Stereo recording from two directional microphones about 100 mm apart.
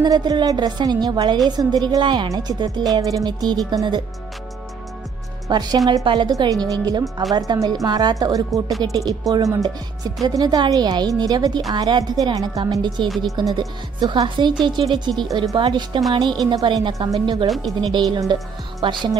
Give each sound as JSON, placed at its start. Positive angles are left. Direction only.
{"t": 0.0, "sound": "a woman's voice", "side_deg": -45}
{"t": 5.5, "sound": "a woman's voice", "side_deg": -45}
{"t": 6.3, "sound": "a woman's voice", "side_deg": -40}
{"t": 12.8, "sound": "a woman's voice", "side_deg": -50}
{"t": 17.5, "sound": "speech", "side_deg": 0}
{"t": 17.7, "sound": "a woman's voice", "side_deg": -45}